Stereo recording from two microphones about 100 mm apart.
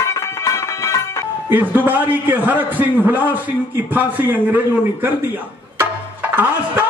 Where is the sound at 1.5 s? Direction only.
20° right (ahead or behind).